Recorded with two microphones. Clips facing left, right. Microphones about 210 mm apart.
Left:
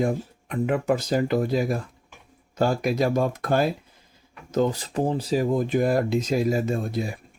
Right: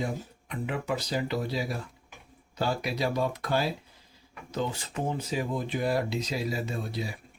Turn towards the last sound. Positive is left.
turn(degrees=50)  # may be behind; listen again after turning